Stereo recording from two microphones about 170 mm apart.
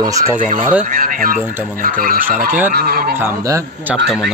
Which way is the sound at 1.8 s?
55° right (ahead or behind).